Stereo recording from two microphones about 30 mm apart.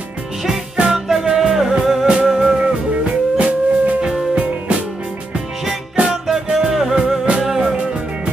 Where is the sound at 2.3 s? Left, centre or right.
Right.